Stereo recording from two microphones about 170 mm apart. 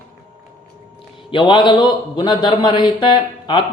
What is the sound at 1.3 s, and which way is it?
Speech, 30° left (ahead or behind).